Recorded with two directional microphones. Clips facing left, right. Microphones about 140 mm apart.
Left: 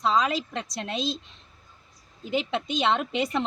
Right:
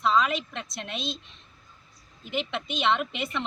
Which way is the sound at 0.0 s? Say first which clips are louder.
Even; 35° left (ahead or behind).